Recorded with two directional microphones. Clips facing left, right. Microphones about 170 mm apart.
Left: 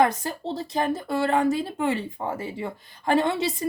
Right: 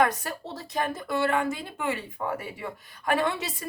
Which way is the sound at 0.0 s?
25° left (ahead or behind).